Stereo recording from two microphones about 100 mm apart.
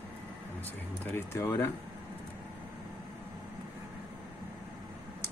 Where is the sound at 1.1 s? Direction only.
25° left (ahead or behind).